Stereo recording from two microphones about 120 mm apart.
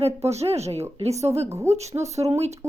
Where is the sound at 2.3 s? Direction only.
65° right (ahead or behind).